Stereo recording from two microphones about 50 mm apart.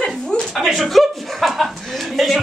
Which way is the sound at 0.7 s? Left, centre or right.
Centre.